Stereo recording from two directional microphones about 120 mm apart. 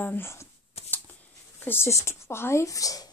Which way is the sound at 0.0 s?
20° left (ahead or behind).